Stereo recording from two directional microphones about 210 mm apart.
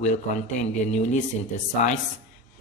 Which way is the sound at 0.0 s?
35° left (ahead or behind).